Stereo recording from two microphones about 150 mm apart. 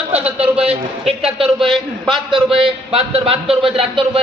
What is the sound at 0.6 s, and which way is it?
Speech, 40° right (ahead or behind).